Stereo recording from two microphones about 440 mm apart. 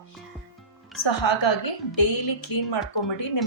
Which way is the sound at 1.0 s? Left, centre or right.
Left.